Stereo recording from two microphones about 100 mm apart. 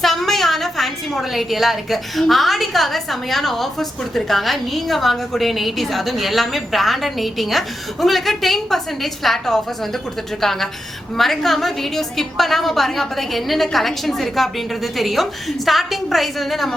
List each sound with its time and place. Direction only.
0.0 s a woman's voice: 5° left (ahead or behind)